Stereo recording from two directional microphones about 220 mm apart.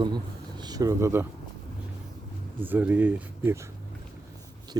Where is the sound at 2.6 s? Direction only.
10° right (ahead or behind).